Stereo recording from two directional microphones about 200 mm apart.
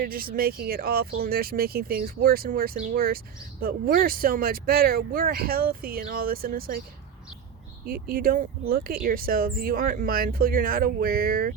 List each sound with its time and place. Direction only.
0.0 s speech: 45° right (ahead or behind)
7.9 s speech: 45° right (ahead or behind)